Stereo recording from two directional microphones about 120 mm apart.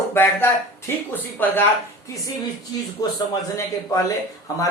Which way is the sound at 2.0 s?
25° left (ahead or behind).